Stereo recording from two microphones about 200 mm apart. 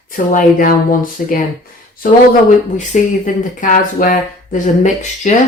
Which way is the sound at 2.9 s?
40° left (ahead or behind).